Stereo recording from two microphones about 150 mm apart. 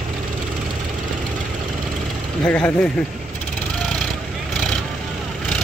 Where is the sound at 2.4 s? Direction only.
10° left (ahead or behind).